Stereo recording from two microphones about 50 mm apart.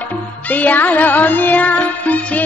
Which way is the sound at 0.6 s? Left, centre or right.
Left.